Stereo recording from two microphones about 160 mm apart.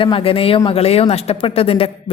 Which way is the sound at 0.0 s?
35° left (ahead or behind).